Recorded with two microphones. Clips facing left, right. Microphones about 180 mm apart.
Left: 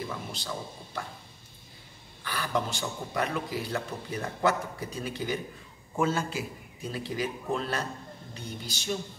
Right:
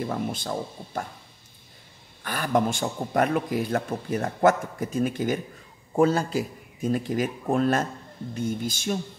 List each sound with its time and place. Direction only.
0.0 s a man's voice: 50° right (ahead or behind)
2.2 s a man's voice: 50° right (ahead or behind)
5.9 s a man's voice: 35° right (ahead or behind)